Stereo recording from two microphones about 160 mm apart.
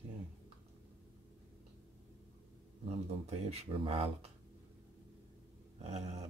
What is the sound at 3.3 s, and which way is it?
Speech, 40° right (ahead or behind).